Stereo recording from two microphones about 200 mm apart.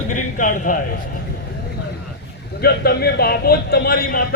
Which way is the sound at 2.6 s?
50° left (ahead or behind).